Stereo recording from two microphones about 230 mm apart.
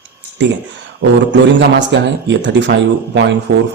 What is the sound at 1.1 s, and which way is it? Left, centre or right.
A man's voice, right.